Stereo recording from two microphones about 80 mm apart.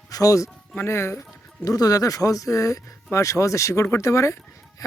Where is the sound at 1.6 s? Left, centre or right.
Left.